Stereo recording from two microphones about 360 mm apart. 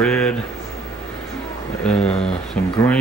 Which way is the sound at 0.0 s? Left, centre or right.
Centre.